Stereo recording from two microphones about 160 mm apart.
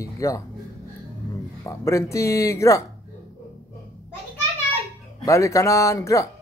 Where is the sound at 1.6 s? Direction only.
20° left (ahead or behind).